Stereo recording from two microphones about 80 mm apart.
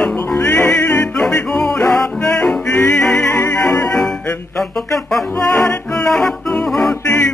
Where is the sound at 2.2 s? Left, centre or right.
Centre.